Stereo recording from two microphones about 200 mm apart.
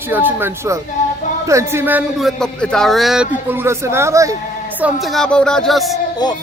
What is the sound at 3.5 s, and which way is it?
Speech, 10° right (ahead or behind).